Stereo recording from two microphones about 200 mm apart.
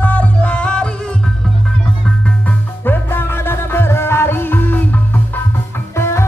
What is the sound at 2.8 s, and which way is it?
Music, 10° left (ahead or behind).